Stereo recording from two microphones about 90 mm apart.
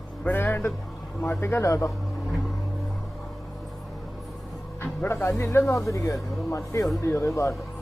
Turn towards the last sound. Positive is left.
turn(degrees=35)  # may be behind; listen again after turning